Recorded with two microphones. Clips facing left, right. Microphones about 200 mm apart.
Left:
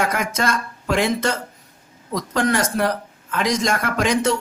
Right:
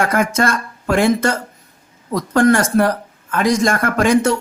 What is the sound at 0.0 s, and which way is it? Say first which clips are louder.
Speech: right 5 dB; 50° right (ahead or behind).